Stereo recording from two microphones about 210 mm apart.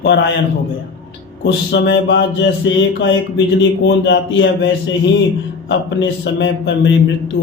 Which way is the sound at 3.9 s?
55° left (ahead or behind).